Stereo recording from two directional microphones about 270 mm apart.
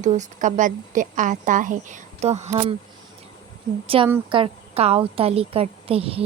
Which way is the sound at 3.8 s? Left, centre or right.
Right.